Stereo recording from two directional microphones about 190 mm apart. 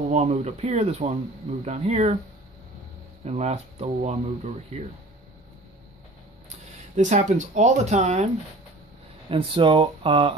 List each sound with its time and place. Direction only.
0.1 s speech: 35° right (ahead or behind)
3.3 s speech: 35° right (ahead or behind)
7.0 s speech: 40° right (ahead or behind)
9.3 s speech: 25° right (ahead or behind)